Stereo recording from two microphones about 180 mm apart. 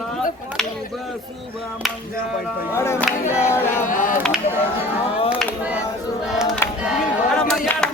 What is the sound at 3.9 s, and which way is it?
Chop, 50° left (ahead or behind).